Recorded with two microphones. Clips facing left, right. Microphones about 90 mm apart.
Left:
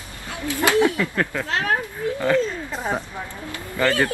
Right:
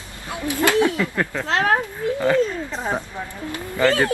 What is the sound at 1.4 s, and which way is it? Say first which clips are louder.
Speech: right 7 dB; 50° right (ahead or behind).